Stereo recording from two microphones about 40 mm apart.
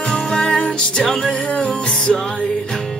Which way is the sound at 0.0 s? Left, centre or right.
Left.